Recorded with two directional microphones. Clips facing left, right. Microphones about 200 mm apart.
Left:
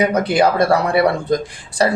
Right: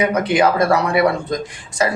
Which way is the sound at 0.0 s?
35° left (ahead or behind).